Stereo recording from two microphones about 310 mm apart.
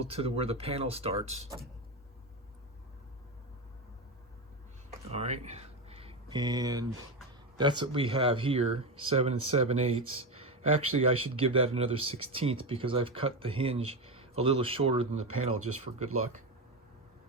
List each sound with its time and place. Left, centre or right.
0.0 s speech: centre
4.9 s a sound: right
7.8 s speech: centre
15.5 s speech: right